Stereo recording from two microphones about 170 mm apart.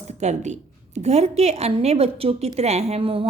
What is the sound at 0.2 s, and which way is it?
A woman's voice, 40° right (ahead or behind).